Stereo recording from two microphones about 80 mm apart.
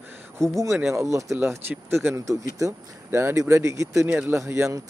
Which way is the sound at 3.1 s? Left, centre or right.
Right.